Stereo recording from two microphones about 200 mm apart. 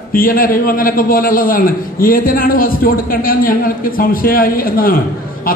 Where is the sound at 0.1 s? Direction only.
45° left (ahead or behind).